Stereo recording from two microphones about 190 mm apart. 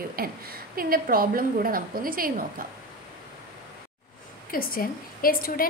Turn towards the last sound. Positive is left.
turn(degrees=50)  # may be behind; listen again after turning